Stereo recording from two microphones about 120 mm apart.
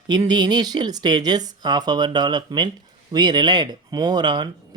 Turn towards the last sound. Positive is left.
turn(degrees=-40)  # may be behind; listen again after turning